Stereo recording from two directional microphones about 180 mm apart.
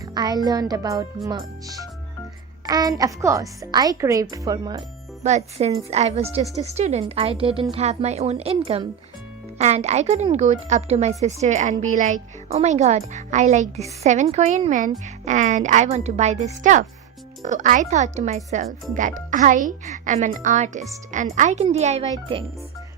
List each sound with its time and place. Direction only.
0.0 s a child's voice: 20° right (ahead or behind)
5.2 s a woman's voice: 35° right (ahead or behind)